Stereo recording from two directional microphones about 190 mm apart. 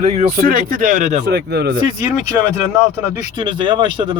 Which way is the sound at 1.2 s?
60° right (ahead or behind).